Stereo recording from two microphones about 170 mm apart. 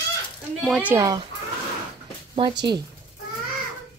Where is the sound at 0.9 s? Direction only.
20° right (ahead or behind).